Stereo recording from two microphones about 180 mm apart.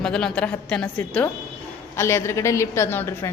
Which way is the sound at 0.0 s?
5° left (ahead or behind).